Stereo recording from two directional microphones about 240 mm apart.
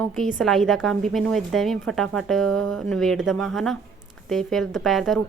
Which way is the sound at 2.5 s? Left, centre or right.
Right.